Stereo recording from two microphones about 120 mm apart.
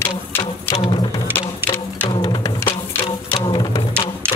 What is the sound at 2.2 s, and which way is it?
Music, 30° left (ahead or behind).